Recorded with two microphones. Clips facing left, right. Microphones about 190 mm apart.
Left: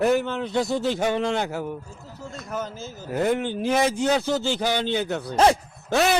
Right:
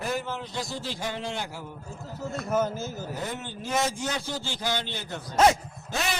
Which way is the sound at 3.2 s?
70° left (ahead or behind).